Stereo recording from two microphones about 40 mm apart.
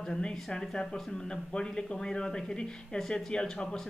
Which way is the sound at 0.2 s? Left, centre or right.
Centre.